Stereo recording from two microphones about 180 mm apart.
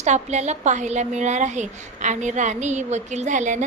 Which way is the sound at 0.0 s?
40° right (ahead or behind).